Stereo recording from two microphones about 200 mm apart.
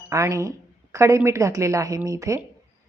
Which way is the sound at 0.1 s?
15° right (ahead or behind).